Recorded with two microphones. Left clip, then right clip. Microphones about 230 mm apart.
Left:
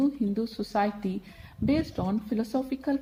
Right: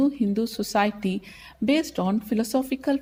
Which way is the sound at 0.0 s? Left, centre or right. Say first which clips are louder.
Right 4 dB; right.